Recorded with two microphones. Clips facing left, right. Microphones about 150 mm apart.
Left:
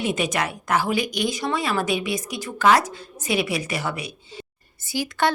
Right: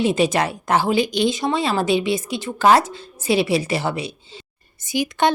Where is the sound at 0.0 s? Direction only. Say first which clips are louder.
Right 6 dB; 30° right (ahead or behind).